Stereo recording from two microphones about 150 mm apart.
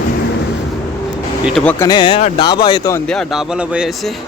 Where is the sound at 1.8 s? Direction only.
30° left (ahead or behind).